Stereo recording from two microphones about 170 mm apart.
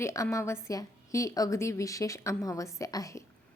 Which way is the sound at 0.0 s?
15° left (ahead or behind).